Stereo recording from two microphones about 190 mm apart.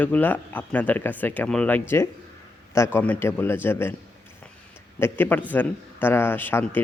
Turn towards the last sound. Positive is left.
turn(degrees=10)  # may be behind; listen again after turning